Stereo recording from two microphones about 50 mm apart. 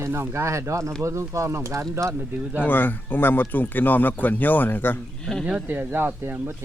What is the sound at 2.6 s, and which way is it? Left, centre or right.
Speech, left.